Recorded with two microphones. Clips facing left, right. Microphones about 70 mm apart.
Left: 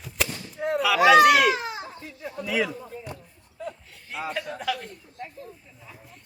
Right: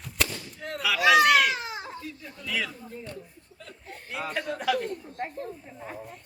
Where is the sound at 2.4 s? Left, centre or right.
Centre.